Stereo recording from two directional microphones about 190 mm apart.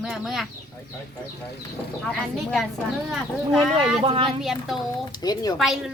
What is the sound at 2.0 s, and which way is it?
Speech, 5° left (ahead or behind).